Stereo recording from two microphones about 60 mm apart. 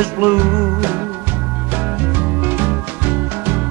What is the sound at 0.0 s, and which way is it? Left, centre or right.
Music, right.